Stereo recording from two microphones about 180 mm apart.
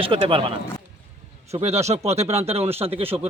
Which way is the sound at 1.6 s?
35° right (ahead or behind).